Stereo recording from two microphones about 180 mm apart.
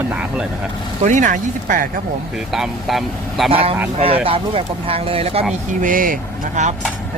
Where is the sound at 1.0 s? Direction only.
45° right (ahead or behind).